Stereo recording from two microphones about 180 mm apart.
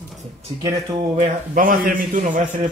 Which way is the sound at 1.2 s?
50° right (ahead or behind).